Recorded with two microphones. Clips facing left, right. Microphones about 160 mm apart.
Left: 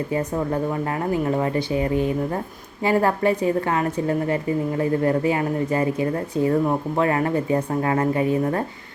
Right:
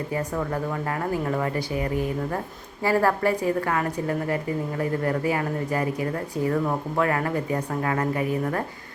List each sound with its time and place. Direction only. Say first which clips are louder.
0.1 s speech: left 3 dB; 25° left (ahead or behind)